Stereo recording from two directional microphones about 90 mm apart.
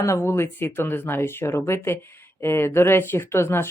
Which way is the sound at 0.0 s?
30° left (ahead or behind).